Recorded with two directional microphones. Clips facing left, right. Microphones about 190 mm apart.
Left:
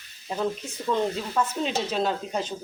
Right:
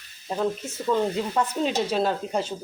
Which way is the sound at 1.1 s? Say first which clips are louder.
Right 2 dB; 15° right (ahead or behind).